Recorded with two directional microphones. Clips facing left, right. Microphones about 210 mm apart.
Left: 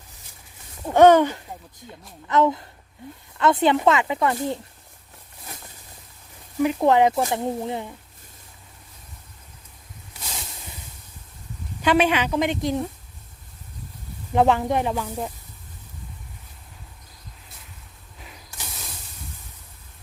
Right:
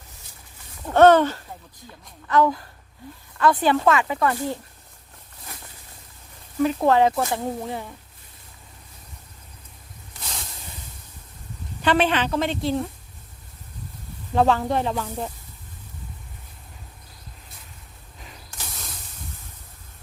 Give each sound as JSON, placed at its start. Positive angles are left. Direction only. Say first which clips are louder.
{"t": 0.9, "sound": "speech", "louder": "left 1 dB", "side_deg": 15}
{"t": 6.6, "sound": "speech", "louder": "left 1 dB", "side_deg": 15}
{"t": 11.8, "sound": "speech", "louder": "left 1 dB", "side_deg": 10}
{"t": 14.3, "sound": "speech", "louder": "left 1 dB", "side_deg": 15}